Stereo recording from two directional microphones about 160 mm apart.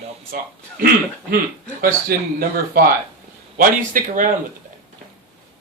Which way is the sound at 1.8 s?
65° right (ahead or behind).